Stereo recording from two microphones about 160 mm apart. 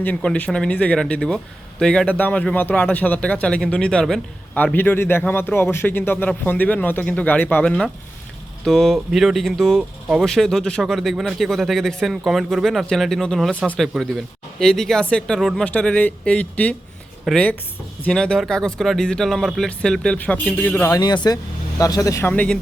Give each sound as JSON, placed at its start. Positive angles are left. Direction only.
{"t": 0.0, "sound": "a man's voice", "side_deg": 10}
{"t": 21.0, "sound": "speech", "side_deg": 25}